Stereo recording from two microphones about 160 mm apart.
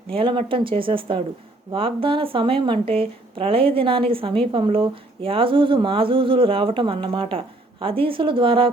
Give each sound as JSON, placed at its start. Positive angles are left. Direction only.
{"t": 0.1, "sound": "speech", "side_deg": -35}